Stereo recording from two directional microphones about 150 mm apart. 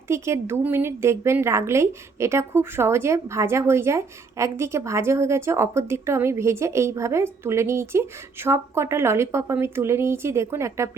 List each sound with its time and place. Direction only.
0.1 s a woman's voice: 15° right (ahead or behind)